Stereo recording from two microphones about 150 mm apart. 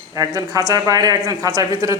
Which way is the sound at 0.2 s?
25° right (ahead or behind).